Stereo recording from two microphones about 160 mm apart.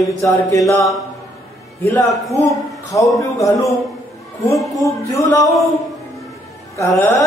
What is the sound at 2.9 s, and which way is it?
Speech, 20° left (ahead or behind).